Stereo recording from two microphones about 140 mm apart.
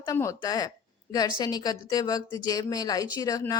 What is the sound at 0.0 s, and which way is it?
A woman's voice, 25° left (ahead or behind).